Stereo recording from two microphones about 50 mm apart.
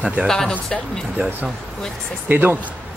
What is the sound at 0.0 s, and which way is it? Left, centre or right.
Speech, right.